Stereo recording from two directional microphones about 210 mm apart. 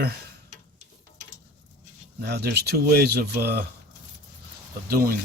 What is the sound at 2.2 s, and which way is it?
Speech, 50° right (ahead or behind).